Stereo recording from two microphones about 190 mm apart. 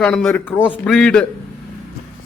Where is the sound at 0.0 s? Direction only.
5° left (ahead or behind).